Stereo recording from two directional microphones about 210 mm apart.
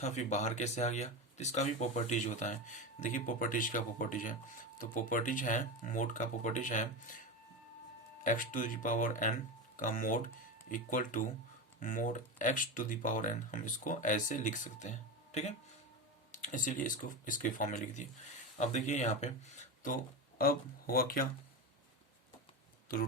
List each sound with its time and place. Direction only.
0.0 s speech: 35° left (ahead or behind)
8.2 s speech: 40° left (ahead or behind)